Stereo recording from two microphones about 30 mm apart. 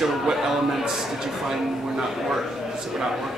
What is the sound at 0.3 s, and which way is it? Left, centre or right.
A man's voice, centre.